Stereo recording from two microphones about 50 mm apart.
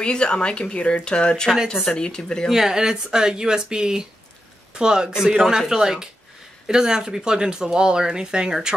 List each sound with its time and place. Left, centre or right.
0.0 s speech: centre
2.5 s speech: centre